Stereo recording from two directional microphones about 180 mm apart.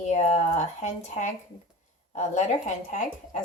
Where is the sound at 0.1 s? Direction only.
40° left (ahead or behind).